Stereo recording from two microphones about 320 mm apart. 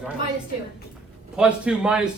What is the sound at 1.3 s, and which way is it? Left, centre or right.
Speech, centre.